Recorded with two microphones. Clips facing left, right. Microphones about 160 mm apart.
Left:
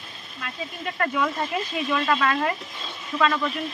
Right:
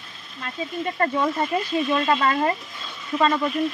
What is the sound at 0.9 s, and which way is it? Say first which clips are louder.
Speech: right 2 dB; 30° right (ahead or behind).